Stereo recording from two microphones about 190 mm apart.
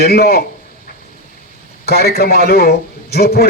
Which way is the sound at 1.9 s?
55° left (ahead or behind).